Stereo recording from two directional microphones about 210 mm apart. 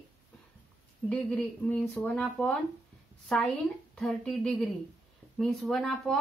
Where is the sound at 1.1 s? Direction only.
5° left (ahead or behind).